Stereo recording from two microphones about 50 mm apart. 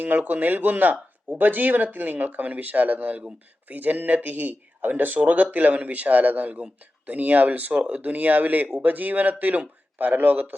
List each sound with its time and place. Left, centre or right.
0.0 s speech: right